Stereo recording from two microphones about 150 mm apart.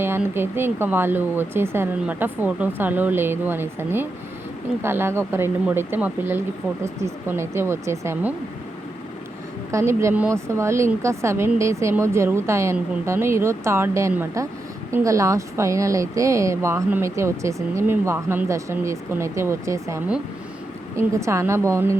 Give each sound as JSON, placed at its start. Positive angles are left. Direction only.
{"t": 0.0, "sound": "speech", "side_deg": -15}
{"t": 9.7, "sound": "speech", "side_deg": -20}